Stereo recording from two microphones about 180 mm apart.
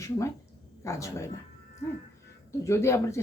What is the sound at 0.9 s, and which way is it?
Speech, 15° left (ahead or behind).